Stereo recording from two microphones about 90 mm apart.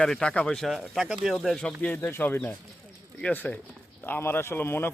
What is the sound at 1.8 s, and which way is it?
A man's voice, 20° left (ahead or behind).